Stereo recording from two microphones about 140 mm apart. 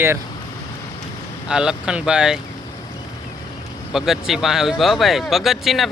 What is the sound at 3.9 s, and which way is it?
Speech, centre (ahead or behind).